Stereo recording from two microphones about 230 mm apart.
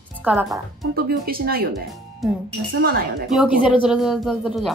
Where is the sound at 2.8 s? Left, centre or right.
Right.